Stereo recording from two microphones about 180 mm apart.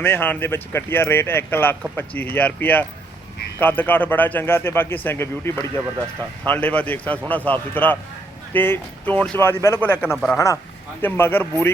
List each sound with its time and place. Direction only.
0.0 s speech: 10° left (ahead or behind)